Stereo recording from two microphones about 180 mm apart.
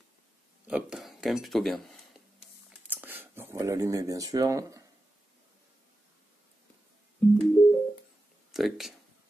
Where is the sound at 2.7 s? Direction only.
10° right (ahead or behind).